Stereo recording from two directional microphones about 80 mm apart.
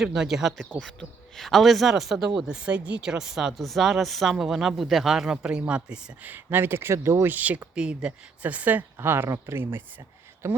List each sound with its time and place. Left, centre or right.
0.0 s speech: centre
0.8 s speech: centre
6.2 s speech: right